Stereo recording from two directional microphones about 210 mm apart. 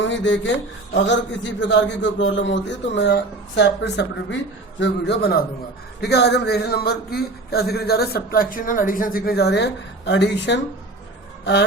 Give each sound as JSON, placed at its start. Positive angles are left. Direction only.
{"t": 0.0, "sound": "a man's voice", "side_deg": 60}